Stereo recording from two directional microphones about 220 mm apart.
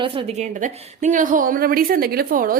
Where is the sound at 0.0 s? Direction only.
25° right (ahead or behind).